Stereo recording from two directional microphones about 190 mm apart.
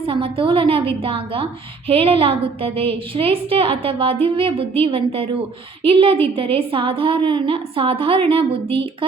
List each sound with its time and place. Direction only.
0.0 s a woman's voice: 30° right (ahead or behind)